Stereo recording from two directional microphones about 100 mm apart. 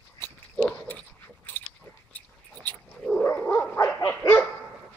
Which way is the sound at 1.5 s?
20° left (ahead or behind).